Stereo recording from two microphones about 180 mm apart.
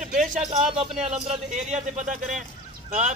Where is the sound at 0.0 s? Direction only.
45° right (ahead or behind).